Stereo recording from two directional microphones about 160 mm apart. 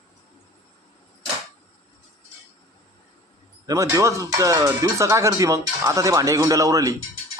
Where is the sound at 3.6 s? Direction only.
20° right (ahead or behind).